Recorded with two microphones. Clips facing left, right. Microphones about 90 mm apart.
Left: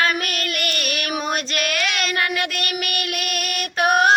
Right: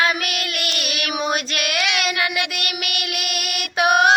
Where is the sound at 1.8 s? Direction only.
40° left (ahead or behind).